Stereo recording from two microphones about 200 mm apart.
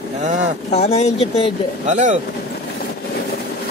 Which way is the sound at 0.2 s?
35° right (ahead or behind).